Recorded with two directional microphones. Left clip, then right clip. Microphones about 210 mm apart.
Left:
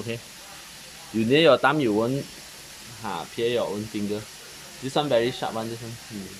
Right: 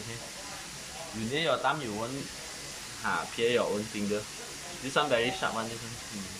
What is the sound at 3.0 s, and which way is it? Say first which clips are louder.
Speech: left 2 dB; 20° left (ahead or behind).